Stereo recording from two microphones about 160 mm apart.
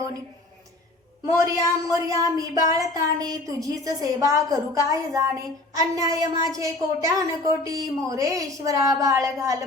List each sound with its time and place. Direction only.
1.2 s a woman's voice: 20° right (ahead or behind)